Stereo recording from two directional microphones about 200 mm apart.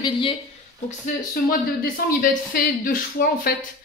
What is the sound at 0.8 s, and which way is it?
Speech, 45° left (ahead or behind).